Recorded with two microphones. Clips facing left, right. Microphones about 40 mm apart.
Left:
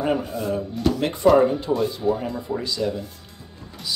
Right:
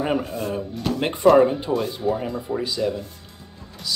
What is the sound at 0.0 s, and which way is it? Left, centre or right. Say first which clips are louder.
Speech: even; centre.